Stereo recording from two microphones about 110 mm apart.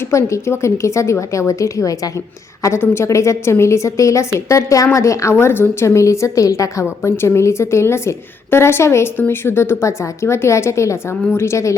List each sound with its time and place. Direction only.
0.1 s a woman's voice: 25° left (ahead or behind)